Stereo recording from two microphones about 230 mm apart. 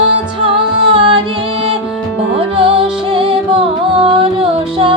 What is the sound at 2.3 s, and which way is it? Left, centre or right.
Music, right.